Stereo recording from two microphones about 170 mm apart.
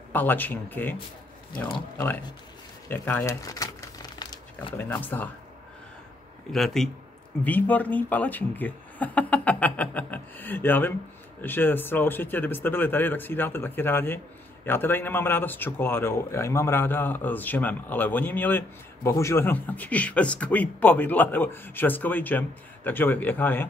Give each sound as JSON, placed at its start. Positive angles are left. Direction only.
{"t": 0.1, "sound": "speech", "side_deg": 10}
{"t": 2.9, "sound": "crumpling", "side_deg": 10}
{"t": 4.7, "sound": "speech", "side_deg": 10}
{"t": 6.5, "sound": "a man's voice", "side_deg": 0}